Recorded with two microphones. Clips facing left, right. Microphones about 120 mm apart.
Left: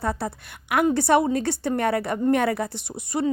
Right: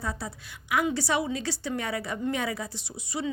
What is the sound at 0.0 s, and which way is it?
A woman's voice, 60° left (ahead or behind).